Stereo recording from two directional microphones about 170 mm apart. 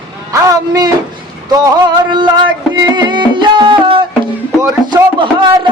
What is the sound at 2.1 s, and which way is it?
Music, 25° right (ahead or behind).